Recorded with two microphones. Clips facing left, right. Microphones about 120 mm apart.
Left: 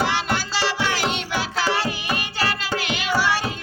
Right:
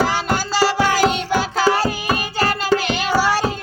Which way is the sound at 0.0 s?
40° right (ahead or behind).